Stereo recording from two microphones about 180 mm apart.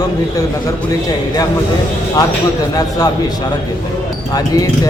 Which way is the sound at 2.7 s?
20° left (ahead or behind).